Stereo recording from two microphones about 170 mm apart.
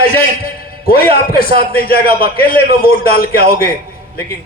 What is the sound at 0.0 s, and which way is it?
A man's voice, 60° left (ahead or behind).